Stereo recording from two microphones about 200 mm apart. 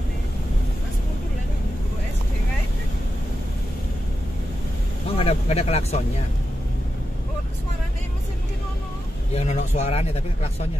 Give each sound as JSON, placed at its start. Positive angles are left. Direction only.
{"t": 5.1, "sound": "speech", "side_deg": 30}
{"t": 9.3, "sound": "speech", "side_deg": 35}